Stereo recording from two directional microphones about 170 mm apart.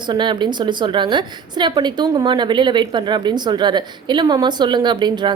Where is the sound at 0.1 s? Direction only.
25° right (ahead or behind).